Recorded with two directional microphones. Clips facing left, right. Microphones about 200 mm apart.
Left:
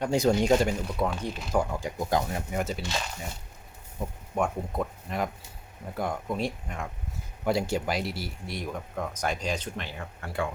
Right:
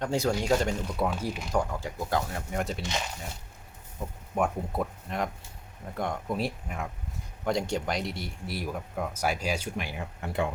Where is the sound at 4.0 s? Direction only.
15° left (ahead or behind).